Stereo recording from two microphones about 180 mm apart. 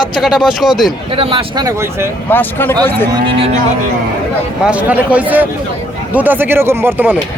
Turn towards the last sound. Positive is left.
turn(degrees=-10)  # may be behind; listen again after turning